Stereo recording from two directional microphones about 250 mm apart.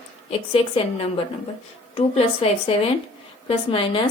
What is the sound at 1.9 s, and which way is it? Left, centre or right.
Speech, left.